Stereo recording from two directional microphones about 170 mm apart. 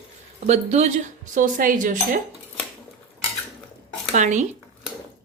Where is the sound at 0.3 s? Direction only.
40° right (ahead or behind).